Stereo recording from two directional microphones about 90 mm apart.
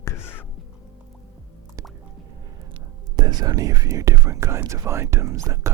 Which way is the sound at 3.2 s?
50° right (ahead or behind).